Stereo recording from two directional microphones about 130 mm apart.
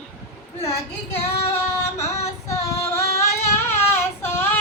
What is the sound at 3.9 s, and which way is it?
Child singing, 15° left (ahead or behind).